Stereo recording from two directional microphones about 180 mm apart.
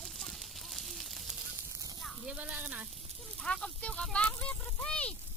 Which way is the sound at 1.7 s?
20° right (ahead or behind).